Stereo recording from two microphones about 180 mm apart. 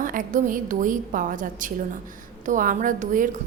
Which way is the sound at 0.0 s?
50° right (ahead or behind).